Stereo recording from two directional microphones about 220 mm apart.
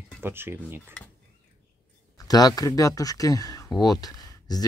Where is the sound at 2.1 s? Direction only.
15° left (ahead or behind).